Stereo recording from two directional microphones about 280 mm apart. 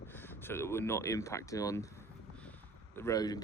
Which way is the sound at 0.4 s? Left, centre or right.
Centre.